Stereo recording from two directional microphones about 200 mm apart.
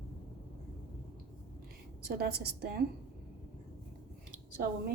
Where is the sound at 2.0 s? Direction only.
55° right (ahead or behind).